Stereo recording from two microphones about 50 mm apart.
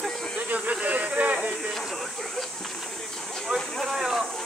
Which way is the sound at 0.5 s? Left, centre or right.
Right.